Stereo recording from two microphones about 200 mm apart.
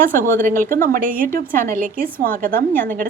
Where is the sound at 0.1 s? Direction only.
45° right (ahead or behind).